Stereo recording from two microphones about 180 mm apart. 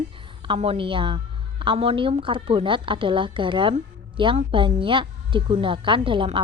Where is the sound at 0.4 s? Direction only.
30° right (ahead or behind).